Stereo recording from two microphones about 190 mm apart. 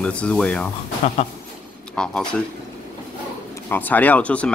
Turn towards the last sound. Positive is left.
turn(degrees=5)  # may be behind; listen again after turning